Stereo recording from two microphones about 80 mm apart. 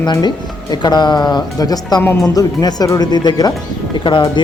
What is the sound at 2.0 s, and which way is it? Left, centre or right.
Speech, left.